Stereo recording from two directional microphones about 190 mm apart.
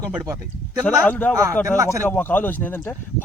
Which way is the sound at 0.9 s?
10° left (ahead or behind).